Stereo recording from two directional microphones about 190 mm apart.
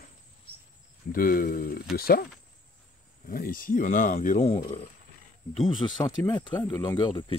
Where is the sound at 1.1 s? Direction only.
50° left (ahead or behind).